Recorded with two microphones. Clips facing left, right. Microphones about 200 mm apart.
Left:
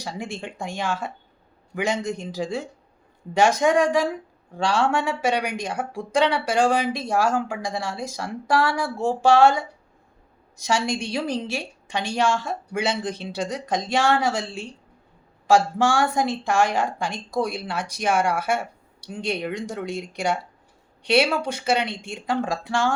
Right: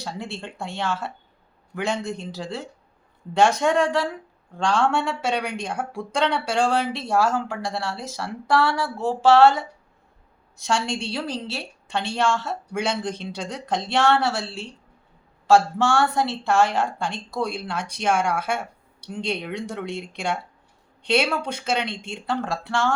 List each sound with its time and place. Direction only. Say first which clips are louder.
0.0 s speech: left 1 dB; 10° left (ahead or behind)
10.8 s speech: left 2 dB; 10° left (ahead or behind)
21.4 s speech: left 2 dB; 10° left (ahead or behind)